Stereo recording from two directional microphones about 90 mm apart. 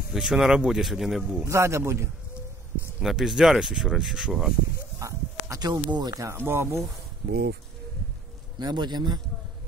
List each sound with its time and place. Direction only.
0.1 s speech: 5° right (ahead or behind)
1.4 s a man's voice: 30° right (ahead or behind)
3.0 s speech: 5° right (ahead or behind)
4.9 s dog: 35° right (ahead or behind)
6.2 s speech: 25° right (ahead or behind)
8.5 s a man's voice: 50° right (ahead or behind)